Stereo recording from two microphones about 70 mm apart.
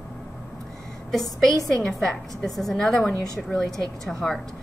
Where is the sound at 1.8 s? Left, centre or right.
Centre.